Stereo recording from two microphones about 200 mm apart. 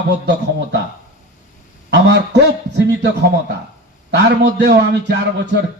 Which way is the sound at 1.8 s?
60° right (ahead or behind).